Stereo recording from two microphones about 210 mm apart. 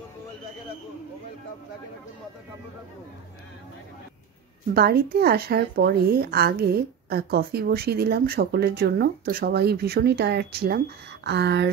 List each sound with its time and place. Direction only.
4.7 s speech: 45° right (ahead or behind)